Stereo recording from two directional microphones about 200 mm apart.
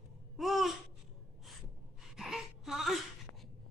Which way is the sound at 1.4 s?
Centre (ahead or behind).